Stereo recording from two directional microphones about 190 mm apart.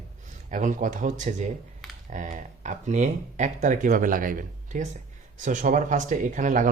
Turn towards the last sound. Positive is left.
turn(degrees=-45)  # may be behind; listen again after turning